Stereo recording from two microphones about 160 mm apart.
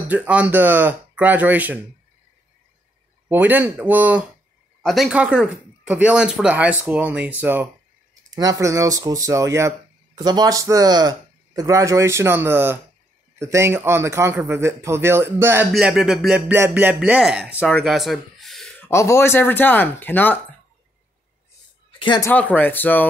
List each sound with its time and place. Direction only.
0.1 s a man's voice: 10° right (ahead or behind)
3.3 s a man's voice: 10° right (ahead or behind)
8.3 s a man's voice: 20° right (ahead or behind)
15.7 s a man's voice: 5° right (ahead or behind)
17.7 s a sound: centre (ahead or behind)
18.9 s speech: 15° left (ahead or behind)
21.9 s a sound: 30° left (ahead or behind)
22.2 s speech: 10° left (ahead or behind)